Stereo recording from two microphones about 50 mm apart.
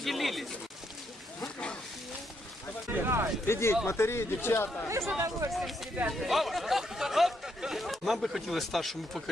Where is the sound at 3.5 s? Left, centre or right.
Left.